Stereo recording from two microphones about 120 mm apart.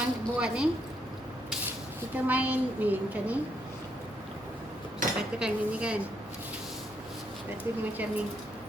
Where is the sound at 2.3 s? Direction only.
10° right (ahead or behind).